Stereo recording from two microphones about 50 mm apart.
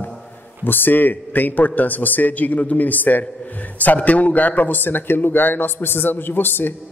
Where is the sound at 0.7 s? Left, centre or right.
Left.